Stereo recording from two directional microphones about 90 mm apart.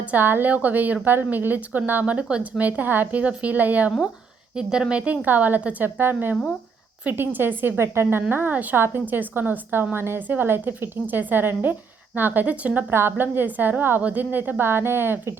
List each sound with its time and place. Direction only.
0.0 s a woman's voice: 20° right (ahead or behind)